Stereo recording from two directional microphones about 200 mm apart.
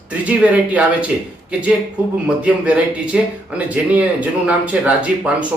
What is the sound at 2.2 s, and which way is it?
A man's voice, 5° right (ahead or behind).